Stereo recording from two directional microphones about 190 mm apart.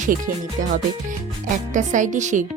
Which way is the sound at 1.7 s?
40° right (ahead or behind).